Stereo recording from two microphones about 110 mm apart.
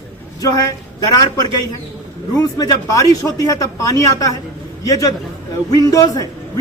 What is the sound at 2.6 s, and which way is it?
A man's voice, 30° left (ahead or behind).